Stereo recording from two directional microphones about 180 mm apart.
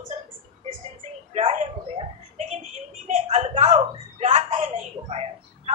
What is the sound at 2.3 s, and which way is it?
A woman's voice, 40° right (ahead or behind).